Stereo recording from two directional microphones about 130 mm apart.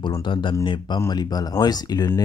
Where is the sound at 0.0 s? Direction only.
40° left (ahead or behind).